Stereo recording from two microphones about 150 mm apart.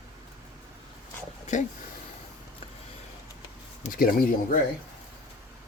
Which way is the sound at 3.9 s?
70° left (ahead or behind).